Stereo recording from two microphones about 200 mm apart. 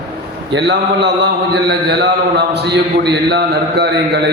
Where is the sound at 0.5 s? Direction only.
60° right (ahead or behind).